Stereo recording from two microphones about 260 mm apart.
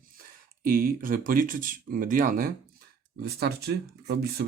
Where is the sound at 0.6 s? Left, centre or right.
Right.